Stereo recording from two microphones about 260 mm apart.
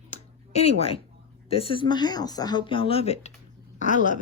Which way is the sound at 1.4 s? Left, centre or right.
Left.